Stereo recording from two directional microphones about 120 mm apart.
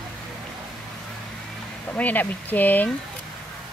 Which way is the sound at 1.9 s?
15° left (ahead or behind).